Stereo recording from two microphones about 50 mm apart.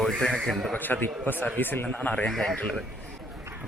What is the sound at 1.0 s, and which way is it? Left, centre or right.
Speech, left.